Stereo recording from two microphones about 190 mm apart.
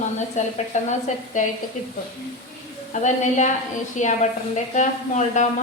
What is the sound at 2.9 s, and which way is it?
Speech, 40° left (ahead or behind).